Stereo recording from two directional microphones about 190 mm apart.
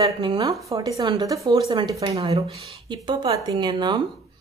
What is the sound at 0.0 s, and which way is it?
Speech, 20° right (ahead or behind).